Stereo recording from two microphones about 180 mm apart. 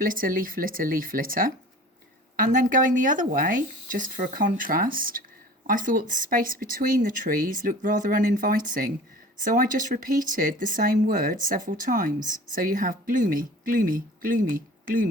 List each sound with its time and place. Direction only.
0.0 s speech: 50° right (ahead or behind)